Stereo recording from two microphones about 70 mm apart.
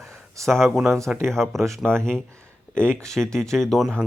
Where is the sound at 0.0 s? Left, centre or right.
Right.